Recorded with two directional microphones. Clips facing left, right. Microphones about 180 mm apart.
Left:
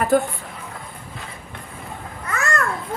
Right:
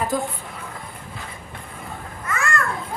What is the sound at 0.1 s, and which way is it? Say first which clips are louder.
Speech: left 10 dB; 60° left (ahead or behind).